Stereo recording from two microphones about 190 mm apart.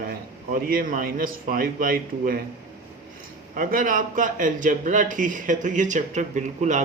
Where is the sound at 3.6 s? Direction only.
45° right (ahead or behind).